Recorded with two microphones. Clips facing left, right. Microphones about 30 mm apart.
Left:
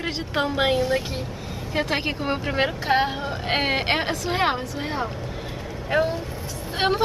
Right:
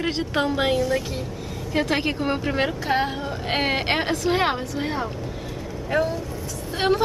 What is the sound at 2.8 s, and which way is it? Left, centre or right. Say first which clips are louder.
Speech: left 1 dB; centre.